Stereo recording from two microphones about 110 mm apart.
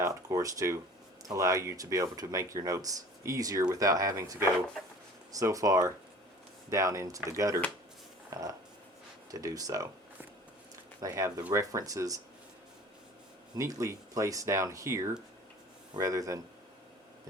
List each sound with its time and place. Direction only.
0.0 s a sound: 30° right (ahead or behind)
1.3 s speech: 30° right (ahead or behind)
8.3 s a sound: 35° right (ahead or behind)
9.3 s speech: 30° right (ahead or behind)
11.0 s speech: 30° right (ahead or behind)
13.6 s speech: 30° right (ahead or behind)